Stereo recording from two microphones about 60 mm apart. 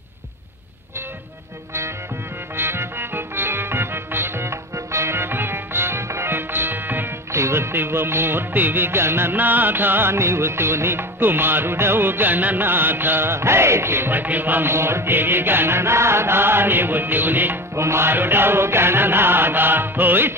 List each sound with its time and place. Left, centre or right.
2.5 s music: right
7.3 s music: right
14.7 s music: right
17.7 s music: right